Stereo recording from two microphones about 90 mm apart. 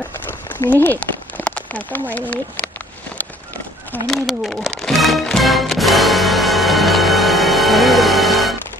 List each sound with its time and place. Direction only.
0.7 s speech: 20° left (ahead or behind)
4.1 s music: 5° left (ahead or behind)